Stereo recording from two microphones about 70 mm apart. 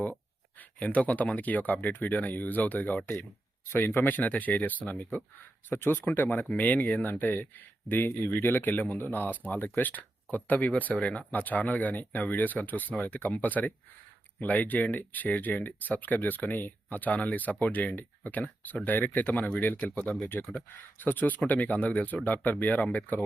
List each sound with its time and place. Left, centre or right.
0.8 s speech: left